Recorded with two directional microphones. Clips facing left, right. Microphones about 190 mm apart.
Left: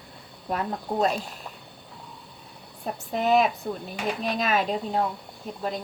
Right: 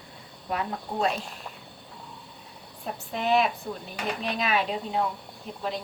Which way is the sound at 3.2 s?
Centre (ahead or behind).